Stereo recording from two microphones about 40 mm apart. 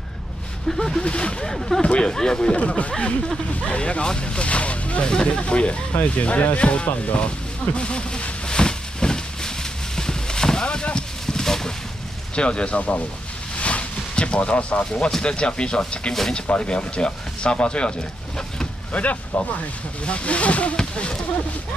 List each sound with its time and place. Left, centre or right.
0.7 s speech: centre
1.0 s speech: left
1.4 s speech: centre
1.8 s speech: left
3.6 s speech: left
7.1 s a sound: left; by 11.7 s centre
12.4 s speech: left
13.6 s a sound: left
14.9 s speech: centre
16.1 s speech: centre
16.3 s speech: left
18.9 s speech: left
20.7 s speech: left